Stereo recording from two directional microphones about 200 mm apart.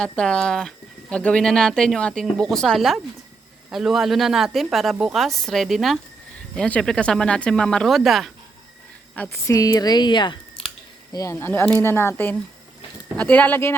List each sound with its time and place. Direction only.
0.0 s a woman's voice: 5° left (ahead or behind)
9.1 s a woman's voice: 10° left (ahead or behind)